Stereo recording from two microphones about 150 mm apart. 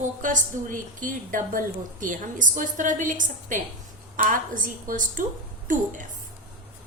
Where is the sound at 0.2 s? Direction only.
60° right (ahead or behind).